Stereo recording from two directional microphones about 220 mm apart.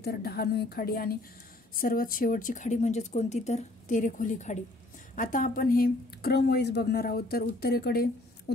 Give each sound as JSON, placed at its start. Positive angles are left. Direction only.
{"t": 0.0, "sound": "a woman's voice", "side_deg": 45}